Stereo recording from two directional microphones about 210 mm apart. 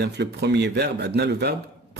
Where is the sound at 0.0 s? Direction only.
55° right (ahead or behind).